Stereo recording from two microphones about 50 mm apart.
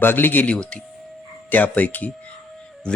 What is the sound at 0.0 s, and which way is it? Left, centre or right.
Speech, left.